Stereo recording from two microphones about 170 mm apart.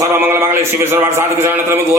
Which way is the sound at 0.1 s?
15° right (ahead or behind).